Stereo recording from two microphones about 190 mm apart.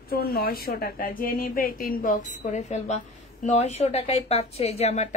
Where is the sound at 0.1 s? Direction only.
55° left (ahead or behind).